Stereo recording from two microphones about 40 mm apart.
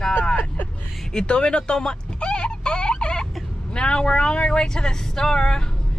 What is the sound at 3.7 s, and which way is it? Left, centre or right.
Speech, left.